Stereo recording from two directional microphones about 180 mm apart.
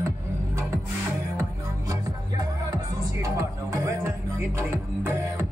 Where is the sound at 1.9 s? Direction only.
20° right (ahead or behind).